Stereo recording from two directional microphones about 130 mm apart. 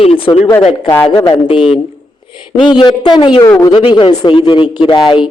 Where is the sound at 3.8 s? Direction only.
40° left (ahead or behind).